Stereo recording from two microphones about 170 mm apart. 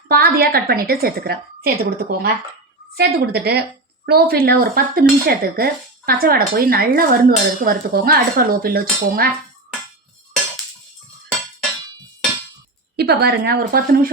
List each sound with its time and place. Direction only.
0.1 s dishes: 65° right (ahead or behind)
2.9 s speech: 70° right (ahead or behind)
4.0 s dishes: 65° right (ahead or behind)
13.0 s speech: 70° right (ahead or behind)